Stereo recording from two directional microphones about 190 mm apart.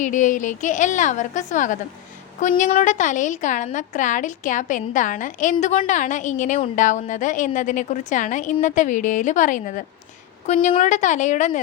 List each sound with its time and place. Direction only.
0.0 s a woman's voice: 40° left (ahead or behind)